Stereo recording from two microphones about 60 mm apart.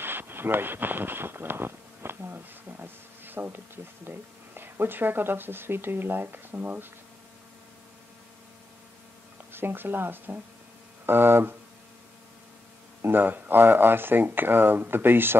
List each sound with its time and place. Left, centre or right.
0.0 s speech: right
9.5 s speech: right
13.0 s speech: right